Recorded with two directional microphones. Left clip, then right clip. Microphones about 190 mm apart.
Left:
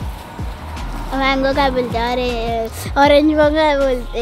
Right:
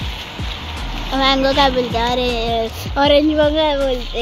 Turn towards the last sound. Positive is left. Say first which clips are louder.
# left 2 dB
turn(degrees=20)  # may be behind; listen again after turning